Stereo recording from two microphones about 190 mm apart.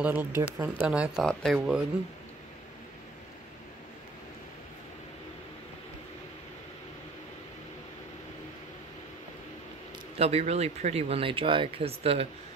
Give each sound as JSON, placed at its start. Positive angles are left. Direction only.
{"t": 0.0, "sound": "speech", "side_deg": -10}
{"t": 10.1, "sound": "speech", "side_deg": -35}